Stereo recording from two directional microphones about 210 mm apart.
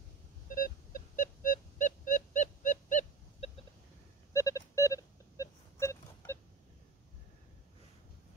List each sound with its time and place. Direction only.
0.5 s wail: 40° left (ahead or behind)
4.3 s telephone dialing: 15° left (ahead or behind)